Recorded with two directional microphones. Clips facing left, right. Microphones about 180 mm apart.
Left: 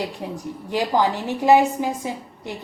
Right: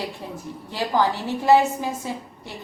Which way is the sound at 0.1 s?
15° left (ahead or behind).